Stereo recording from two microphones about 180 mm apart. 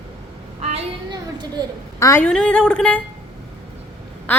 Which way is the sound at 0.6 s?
35° right (ahead or behind).